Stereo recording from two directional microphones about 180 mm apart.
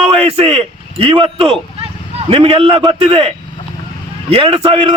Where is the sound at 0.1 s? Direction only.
35° right (ahead or behind).